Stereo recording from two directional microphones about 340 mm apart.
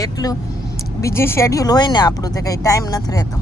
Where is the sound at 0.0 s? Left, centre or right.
Centre.